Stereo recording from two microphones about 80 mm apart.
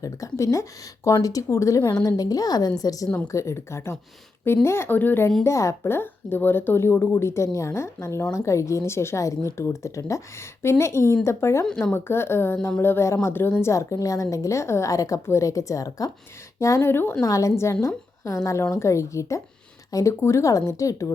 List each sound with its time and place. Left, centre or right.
0.0 s a woman's voice: left
3.3 s speech: left
5.4 s speech: left
11.6 s speech: centre
11.9 s a woman's voice: left
17.2 s a woman's voice: left